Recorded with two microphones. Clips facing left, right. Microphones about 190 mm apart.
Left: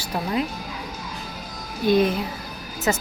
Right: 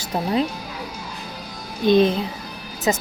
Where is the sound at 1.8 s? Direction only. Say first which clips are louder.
Right 3 dB; 25° right (ahead or behind).